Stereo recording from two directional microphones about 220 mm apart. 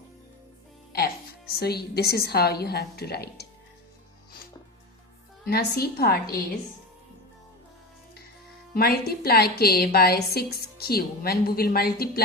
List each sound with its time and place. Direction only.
0.9 s speech: 45° left (ahead or behind)
5.5 s a woman's voice: 45° left (ahead or behind)
8.7 s a woman's voice: 45° left (ahead or behind)